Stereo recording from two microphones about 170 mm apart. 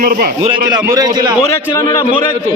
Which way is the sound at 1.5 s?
20° left (ahead or behind).